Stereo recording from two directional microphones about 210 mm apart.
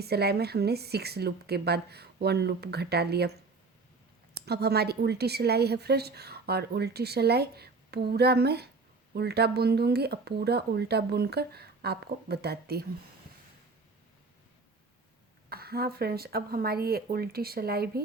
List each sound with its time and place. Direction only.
0.0 s a woman's voice: 50° right (ahead or behind)
4.4 s a woman's voice: 50° right (ahead or behind)
15.4 s a woman's voice: 45° right (ahead or behind)